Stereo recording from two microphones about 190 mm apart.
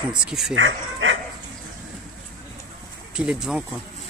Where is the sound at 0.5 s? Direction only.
80° right.